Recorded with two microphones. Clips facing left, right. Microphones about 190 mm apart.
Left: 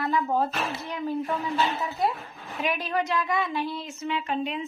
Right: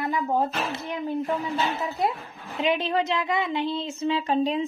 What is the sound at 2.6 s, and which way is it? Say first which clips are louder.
Speech: right 4 dB; 25° right (ahead or behind).